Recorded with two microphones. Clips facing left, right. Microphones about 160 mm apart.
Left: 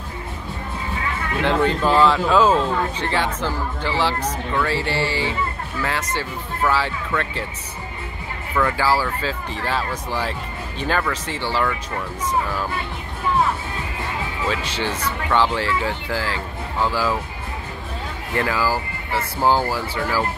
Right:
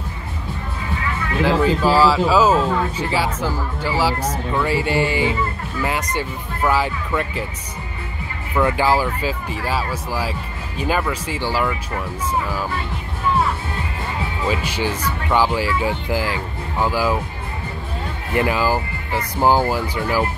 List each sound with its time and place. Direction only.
1.4 s speech: 5° right (ahead or behind)
8.5 s speech: 20° right (ahead or behind)
14.5 s speech: 10° right (ahead or behind)
18.3 s speech: 15° right (ahead or behind)